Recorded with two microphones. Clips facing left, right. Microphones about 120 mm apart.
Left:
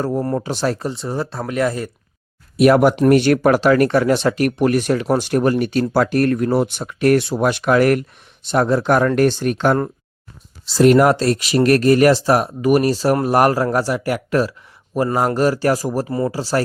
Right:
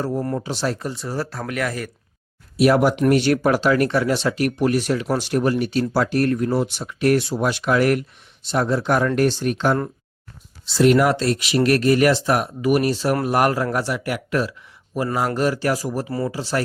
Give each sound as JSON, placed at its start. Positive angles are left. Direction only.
{"t": 0.3, "sound": "speech", "side_deg": 50}
{"t": 0.8, "sound": "speech", "side_deg": 25}
{"t": 2.6, "sound": "speech", "side_deg": 55}